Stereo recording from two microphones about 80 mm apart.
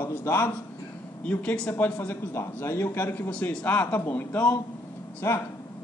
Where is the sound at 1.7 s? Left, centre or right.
Left.